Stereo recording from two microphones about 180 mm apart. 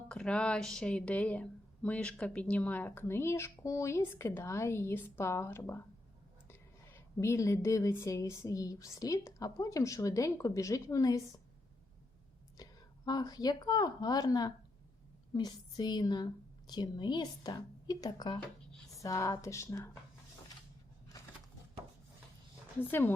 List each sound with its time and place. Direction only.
0.1 s speech: 5° left (ahead or behind)
12.6 s a sound: 20° left (ahead or behind)
13.1 s a woman's voice: 20° left (ahead or behind)
22.8 s speech: 10° left (ahead or behind)